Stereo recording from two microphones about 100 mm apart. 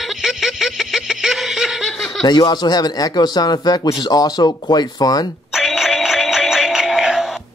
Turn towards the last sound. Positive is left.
turn(degrees=-5)  # may be behind; listen again after turning